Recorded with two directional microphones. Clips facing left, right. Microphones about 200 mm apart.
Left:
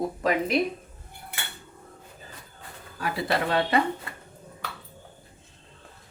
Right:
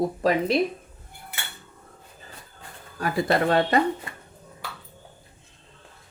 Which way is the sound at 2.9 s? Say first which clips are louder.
Right 4 dB; 45° right (ahead or behind).